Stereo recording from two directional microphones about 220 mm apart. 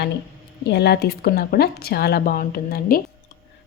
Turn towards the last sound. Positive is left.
turn(degrees=40)  # may be behind; listen again after turning